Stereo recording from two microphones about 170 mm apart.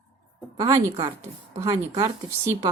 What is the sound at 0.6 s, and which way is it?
A woman's voice, 20° right (ahead or behind).